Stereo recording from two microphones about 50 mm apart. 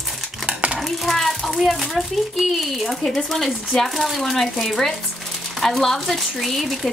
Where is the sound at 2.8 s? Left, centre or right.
Centre.